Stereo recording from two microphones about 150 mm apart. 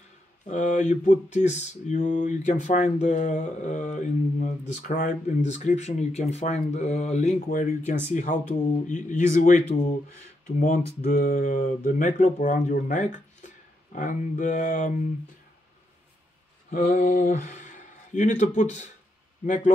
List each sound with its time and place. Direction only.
0.5 s a sound: 55° left (ahead or behind)
11.1 s speech: 65° left (ahead or behind)
16.7 s speech: 75° left (ahead or behind); by 19.7 s 55° left (ahead or behind)